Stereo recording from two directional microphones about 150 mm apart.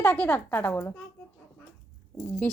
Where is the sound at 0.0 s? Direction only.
10° left (ahead or behind).